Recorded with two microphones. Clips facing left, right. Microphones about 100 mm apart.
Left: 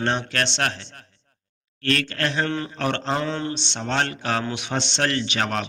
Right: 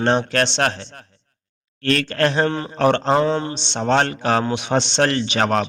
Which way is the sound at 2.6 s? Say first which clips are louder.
Right 8 dB; 30° right (ahead or behind).